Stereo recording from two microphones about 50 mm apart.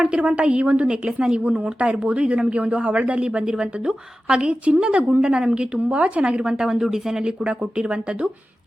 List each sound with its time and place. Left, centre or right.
0.2 s speech: right
0.9 s a woman's voice: centre